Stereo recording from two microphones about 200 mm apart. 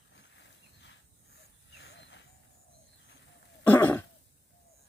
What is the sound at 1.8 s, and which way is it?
Vehicle, 60° left (ahead or behind).